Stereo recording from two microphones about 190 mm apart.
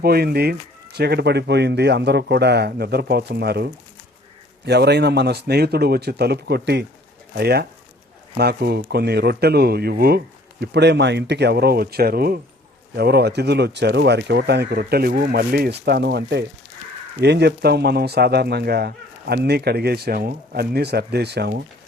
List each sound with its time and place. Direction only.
0.0 s speech: 55° right (ahead or behind)